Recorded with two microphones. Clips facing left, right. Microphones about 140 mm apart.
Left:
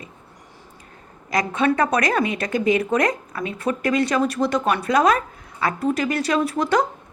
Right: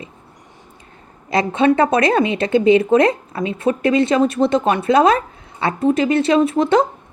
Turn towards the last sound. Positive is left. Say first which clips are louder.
# right 6 dB
turn(degrees=-25)  # may be behind; listen again after turning